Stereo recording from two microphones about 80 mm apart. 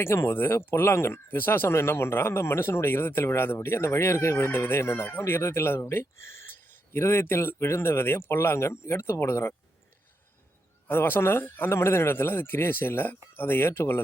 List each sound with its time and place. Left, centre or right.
0.0 s speech: left
10.8 s a man's voice: left